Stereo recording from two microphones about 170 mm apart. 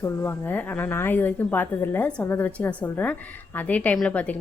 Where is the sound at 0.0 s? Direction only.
10° left (ahead or behind).